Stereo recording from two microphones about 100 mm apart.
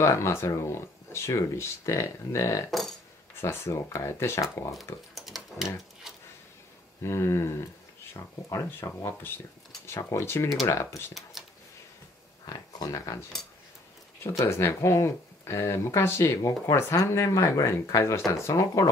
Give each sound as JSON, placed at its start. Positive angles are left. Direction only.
{"t": 0.0, "sound": "speech", "side_deg": 25}
{"t": 5.1, "sound": "a sound", "side_deg": 0}
{"t": 7.0, "sound": "speech", "side_deg": 25}
{"t": 12.4, "sound": "speech", "side_deg": 40}
{"t": 14.4, "sound": "speech", "side_deg": 25}